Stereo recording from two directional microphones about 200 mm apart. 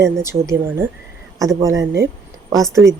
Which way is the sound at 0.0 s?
15° right (ahead or behind).